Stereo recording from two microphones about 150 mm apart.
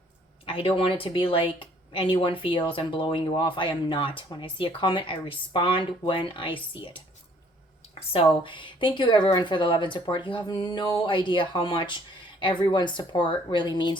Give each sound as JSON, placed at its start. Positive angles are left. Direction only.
{"t": 0.4, "sound": "speech", "side_deg": 35}
{"t": 8.4, "sound": "speech", "side_deg": 35}